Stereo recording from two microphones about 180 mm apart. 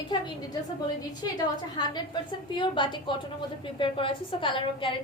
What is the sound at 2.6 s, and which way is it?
A woman's voice, 25° left (ahead or behind).